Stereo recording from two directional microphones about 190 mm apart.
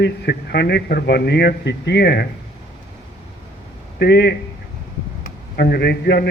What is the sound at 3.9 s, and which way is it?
A man's voice, 60° left (ahead or behind).